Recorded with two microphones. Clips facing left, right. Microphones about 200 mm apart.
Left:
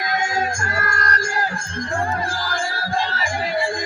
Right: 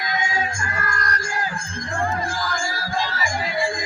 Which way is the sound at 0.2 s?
45° left (ahead or behind).